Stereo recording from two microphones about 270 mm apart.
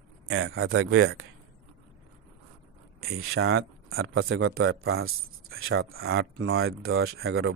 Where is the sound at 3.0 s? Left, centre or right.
Right.